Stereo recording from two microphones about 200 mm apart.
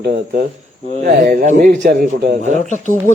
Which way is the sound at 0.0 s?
55° right (ahead or behind).